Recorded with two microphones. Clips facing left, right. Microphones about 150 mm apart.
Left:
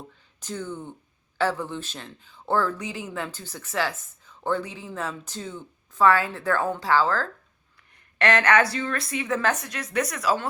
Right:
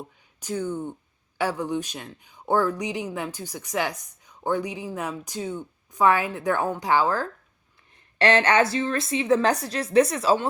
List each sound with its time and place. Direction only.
0.3 s speech: 10° right (ahead or behind)
8.2 s a woman's voice: 30° right (ahead or behind)